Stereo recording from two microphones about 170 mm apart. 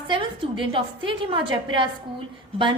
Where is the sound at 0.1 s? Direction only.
30° right (ahead or behind).